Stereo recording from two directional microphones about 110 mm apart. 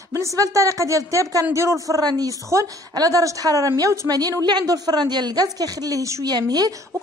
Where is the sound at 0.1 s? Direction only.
30° right (ahead or behind).